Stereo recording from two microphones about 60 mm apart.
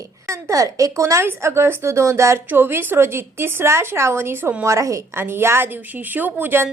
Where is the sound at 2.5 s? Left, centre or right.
Right.